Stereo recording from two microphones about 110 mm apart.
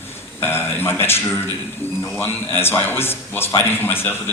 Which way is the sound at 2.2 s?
20° left (ahead or behind).